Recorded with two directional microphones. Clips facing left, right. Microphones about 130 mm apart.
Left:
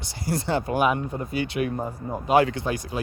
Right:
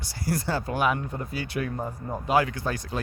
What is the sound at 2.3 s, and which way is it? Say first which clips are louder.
Speech: left 4 dB; 25° left (ahead or behind).